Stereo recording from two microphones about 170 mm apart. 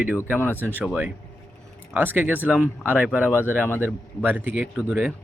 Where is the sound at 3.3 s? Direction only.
10° left (ahead or behind).